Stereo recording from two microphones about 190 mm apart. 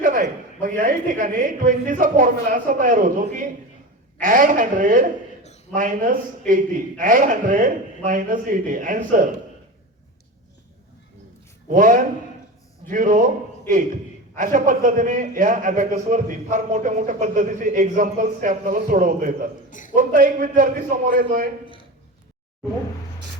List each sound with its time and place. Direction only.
0.0 s a man's voice: 45° right (ahead or behind)
11.7 s a man's voice: 45° right (ahead or behind)